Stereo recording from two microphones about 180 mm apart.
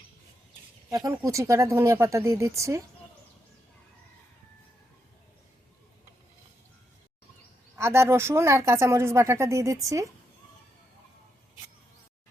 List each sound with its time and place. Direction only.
0.9 s speech: 20° right (ahead or behind)
7.8 s speech: 15° right (ahead or behind)